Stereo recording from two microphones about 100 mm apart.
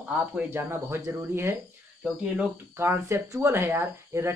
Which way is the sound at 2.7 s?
30° right (ahead or behind).